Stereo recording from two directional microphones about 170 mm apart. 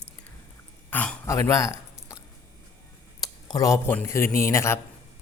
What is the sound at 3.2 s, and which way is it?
Speech, 20° left (ahead or behind).